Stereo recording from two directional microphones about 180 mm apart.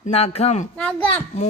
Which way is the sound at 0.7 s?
5° left (ahead or behind).